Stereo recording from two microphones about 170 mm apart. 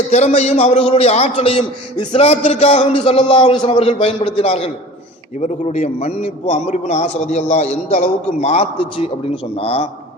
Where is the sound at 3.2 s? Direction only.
30° left (ahead or behind).